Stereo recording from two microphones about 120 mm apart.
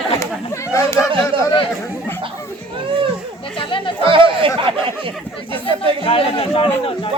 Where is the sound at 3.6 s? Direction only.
45° left (ahead or behind).